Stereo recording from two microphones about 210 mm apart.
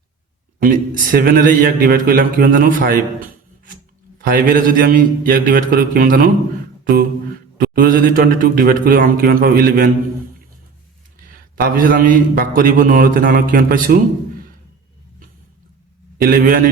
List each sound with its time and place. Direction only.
0.6 s a man's voice: 40° right (ahead or behind)
7.6 s a man's voice: 45° right (ahead or behind)
11.3 s a man's voice: 40° right (ahead or behind)
16.2 s a man's voice: 45° right (ahead or behind)